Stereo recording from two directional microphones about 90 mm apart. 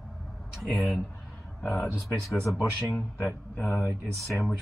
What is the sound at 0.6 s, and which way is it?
Speech, 15° left (ahead or behind).